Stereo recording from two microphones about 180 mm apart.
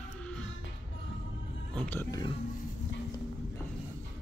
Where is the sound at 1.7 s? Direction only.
10° left (ahead or behind).